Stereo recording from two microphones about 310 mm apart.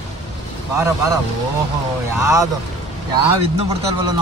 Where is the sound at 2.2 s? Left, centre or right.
Centre.